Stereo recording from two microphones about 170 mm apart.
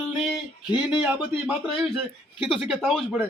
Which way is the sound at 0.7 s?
25° left (ahead or behind).